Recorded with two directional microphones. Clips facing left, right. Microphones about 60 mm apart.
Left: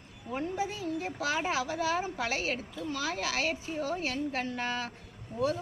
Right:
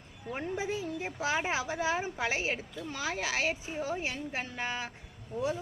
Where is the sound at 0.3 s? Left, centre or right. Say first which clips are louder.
Left 1 dB; right.